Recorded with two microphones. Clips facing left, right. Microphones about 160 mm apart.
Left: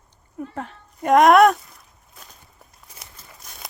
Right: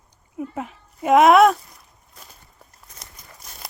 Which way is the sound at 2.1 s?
5° right (ahead or behind).